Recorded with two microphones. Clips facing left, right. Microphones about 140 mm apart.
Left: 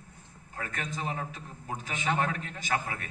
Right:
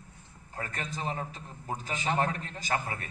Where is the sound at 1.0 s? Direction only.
35° right (ahead or behind).